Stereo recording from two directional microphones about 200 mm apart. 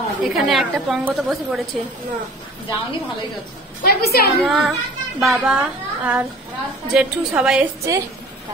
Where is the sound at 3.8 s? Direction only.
50° left (ahead or behind).